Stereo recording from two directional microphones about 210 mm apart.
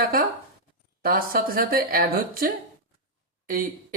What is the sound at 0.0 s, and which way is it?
A man's voice, 45° right (ahead or behind).